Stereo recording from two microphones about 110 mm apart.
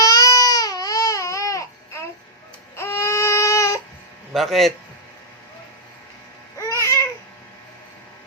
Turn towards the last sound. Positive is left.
turn(degrees=30)  # may be behind; listen again after turning